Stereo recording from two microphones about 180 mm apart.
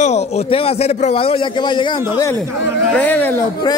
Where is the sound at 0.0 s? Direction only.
40° left (ahead or behind).